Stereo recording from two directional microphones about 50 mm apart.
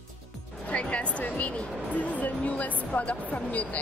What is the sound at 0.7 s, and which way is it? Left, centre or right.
Speech, left.